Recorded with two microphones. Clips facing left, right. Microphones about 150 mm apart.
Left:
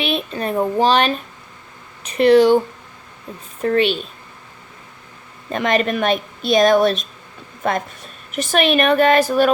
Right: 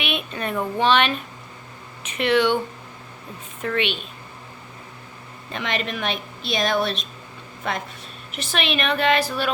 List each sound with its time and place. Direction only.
0.0 s speech: 35° left (ahead or behind)
3.6 s speech: 40° left (ahead or behind)
5.5 s speech: 45° left (ahead or behind)